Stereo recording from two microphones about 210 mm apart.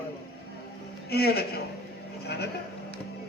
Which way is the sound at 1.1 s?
50° left (ahead or behind).